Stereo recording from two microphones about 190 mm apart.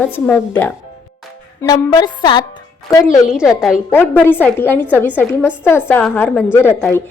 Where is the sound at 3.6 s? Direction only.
Centre (ahead or behind).